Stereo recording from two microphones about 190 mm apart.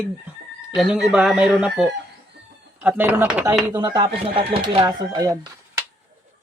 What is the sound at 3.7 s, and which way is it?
Speech, 20° right (ahead or behind).